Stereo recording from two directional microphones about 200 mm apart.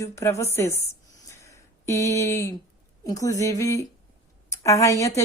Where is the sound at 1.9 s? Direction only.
15° left (ahead or behind).